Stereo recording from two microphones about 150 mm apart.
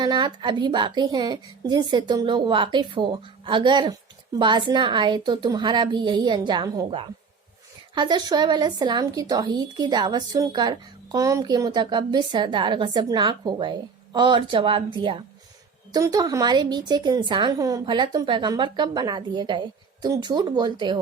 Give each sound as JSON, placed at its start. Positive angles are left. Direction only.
{"t": 0.0, "sound": "a woman's voice", "side_deg": -30}
{"t": 15.9, "sound": "speech", "side_deg": -25}